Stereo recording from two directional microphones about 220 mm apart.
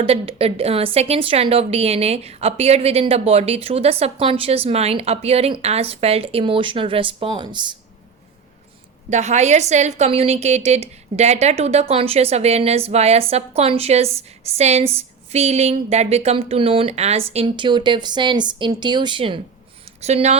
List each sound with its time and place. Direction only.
0.0 s a woman's voice: 25° right (ahead or behind)
9.0 s a woman's voice: 30° right (ahead or behind)
19.8 s a sound: 30° right (ahead or behind)